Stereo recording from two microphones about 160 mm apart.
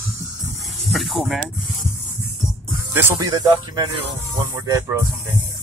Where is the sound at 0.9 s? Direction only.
Centre (ahead or behind).